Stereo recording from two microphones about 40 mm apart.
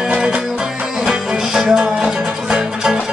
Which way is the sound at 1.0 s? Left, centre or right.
Centre.